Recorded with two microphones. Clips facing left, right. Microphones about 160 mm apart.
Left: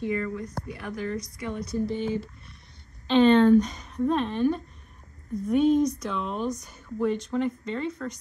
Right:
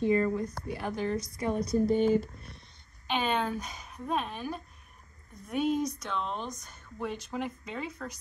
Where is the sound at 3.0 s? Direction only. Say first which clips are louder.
Left 12 dB; 10° right (ahead or behind).